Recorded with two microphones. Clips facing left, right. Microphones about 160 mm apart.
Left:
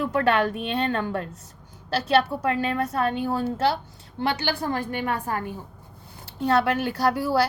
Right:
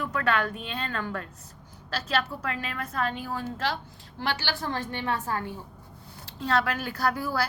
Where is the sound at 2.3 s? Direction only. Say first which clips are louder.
Left 9 dB; 25° left (ahead or behind).